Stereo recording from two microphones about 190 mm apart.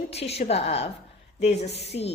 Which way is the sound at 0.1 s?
35° left (ahead or behind).